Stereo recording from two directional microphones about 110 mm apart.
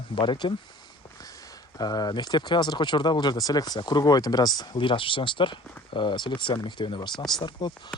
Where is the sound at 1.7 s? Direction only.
35° left (ahead or behind).